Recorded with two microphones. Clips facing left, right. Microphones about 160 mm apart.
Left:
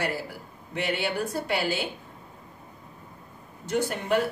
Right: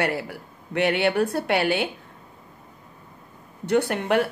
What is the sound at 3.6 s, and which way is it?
Speech, 65° right (ahead or behind).